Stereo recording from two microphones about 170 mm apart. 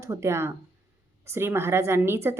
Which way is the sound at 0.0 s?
15° right (ahead or behind).